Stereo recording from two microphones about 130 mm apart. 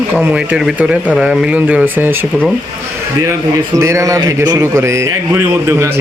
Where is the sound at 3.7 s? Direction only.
25° right (ahead or behind).